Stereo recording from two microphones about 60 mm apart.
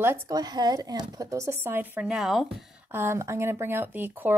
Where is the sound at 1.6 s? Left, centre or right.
Right.